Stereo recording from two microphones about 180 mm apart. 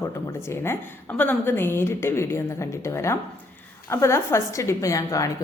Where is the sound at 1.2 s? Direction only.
10° left (ahead or behind).